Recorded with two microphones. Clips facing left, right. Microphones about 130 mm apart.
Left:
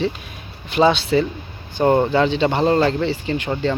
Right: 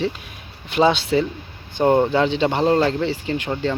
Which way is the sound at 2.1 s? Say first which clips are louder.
Left 1 dB; 15° right (ahead or behind).